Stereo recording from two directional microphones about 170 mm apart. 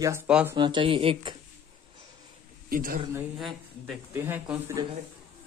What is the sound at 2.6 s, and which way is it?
Speech, 55° right (ahead or behind).